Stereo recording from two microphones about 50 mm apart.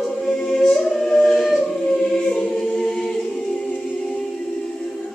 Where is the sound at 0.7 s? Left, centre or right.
Centre.